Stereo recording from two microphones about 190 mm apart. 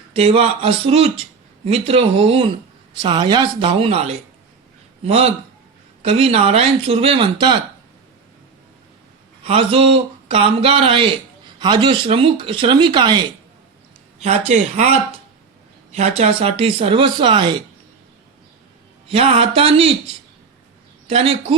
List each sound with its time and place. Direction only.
0.1 s speech: 30° right (ahead or behind)
9.4 s speech: 30° right (ahead or behind)
14.2 s speech: 35° right (ahead or behind)
19.0 s speech: 30° right (ahead or behind)
21.1 s speech: 30° right (ahead or behind)